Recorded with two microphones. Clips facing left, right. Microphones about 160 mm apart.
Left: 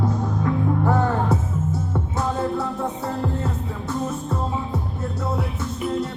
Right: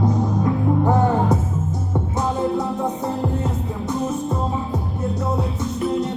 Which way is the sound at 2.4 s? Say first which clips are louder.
Right 3 dB; 15° right (ahead or behind).